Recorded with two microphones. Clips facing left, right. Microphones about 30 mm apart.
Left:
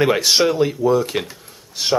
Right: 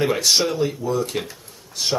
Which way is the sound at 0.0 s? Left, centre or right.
Left.